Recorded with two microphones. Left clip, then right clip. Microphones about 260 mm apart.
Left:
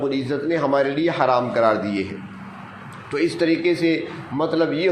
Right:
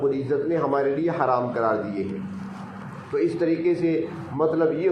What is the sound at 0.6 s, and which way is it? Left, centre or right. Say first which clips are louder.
Speech: left 3 dB; left.